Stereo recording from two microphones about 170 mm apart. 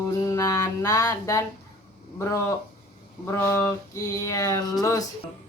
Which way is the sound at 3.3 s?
15° left (ahead or behind).